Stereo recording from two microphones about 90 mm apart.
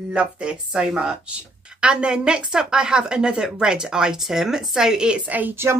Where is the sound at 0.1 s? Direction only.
10° right (ahead or behind).